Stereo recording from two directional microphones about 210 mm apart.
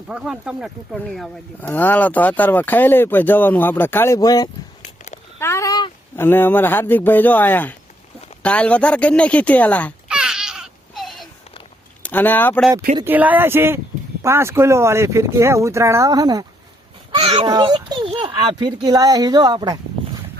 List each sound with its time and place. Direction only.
0.1 s speech: 5° right (ahead or behind)
10.1 s a sound: 5° right (ahead or behind)
12.0 s speech: 10° left (ahead or behind)
13.1 s a child's voice: 10° right (ahead or behind)